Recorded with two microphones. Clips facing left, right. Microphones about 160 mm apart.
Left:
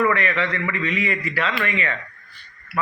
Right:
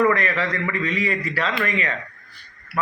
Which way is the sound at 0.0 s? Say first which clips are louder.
Right 1 dB; 40° right (ahead or behind).